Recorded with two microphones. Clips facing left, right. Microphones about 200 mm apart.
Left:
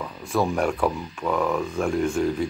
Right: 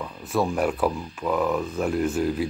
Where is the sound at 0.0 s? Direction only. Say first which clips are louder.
Left 1 dB; centre (ahead or behind).